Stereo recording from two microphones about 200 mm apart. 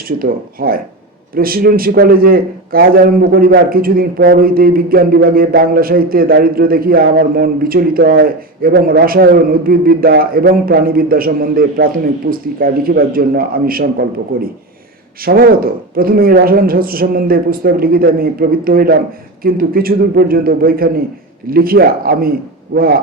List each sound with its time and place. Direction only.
0.2 s a man's voice: 45° right (ahead or behind)
15.2 s a man's voice: 50° right (ahead or behind)